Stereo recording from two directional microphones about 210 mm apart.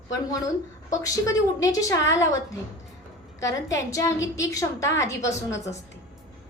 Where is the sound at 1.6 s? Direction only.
15° left (ahead or behind).